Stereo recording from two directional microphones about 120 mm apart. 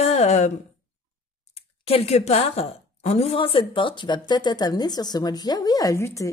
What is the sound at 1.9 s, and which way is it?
A woman's voice, 60° left (ahead or behind).